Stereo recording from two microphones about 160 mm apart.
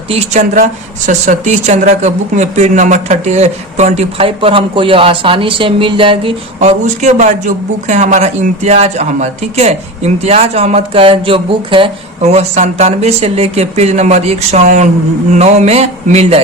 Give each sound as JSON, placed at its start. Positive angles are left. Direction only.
{"t": 0.1, "sound": "speech", "side_deg": -45}
{"t": 6.6, "sound": "speech", "side_deg": -45}